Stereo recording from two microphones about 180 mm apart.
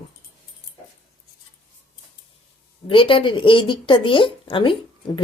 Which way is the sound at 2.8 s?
30° left (ahead or behind).